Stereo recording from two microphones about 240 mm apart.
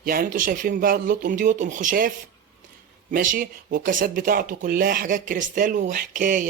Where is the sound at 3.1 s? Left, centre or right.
Right.